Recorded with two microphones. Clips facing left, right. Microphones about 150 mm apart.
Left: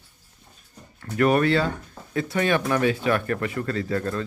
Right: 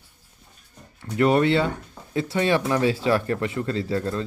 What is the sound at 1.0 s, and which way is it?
Speech, 20° right (ahead or behind).